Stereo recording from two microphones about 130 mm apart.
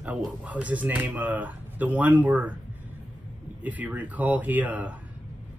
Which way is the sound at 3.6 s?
10° right (ahead or behind).